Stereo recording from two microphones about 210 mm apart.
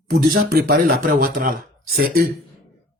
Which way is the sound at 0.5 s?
45° right (ahead or behind).